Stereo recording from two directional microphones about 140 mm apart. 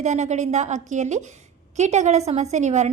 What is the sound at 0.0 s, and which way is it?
A woman's voice, 55° right (ahead or behind).